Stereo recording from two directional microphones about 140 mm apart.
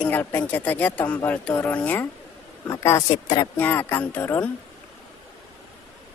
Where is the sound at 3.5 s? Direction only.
15° left (ahead or behind).